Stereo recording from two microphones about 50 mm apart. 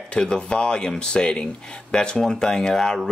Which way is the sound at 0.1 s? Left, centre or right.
Centre.